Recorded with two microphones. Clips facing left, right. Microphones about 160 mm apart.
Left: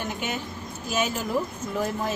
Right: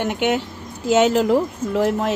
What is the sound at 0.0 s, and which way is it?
Speech, 75° right (ahead or behind).